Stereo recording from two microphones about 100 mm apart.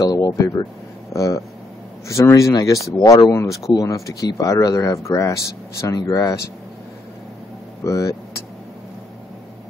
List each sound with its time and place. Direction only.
0.0 s speech: 35° left (ahead or behind)
7.8 s speech: 35° left (ahead or behind)